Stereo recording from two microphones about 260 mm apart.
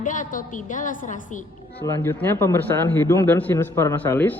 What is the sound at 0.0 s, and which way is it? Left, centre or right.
A woman's voice, left.